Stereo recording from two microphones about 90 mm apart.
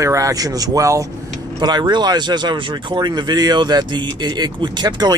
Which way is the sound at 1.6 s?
55° right (ahead or behind).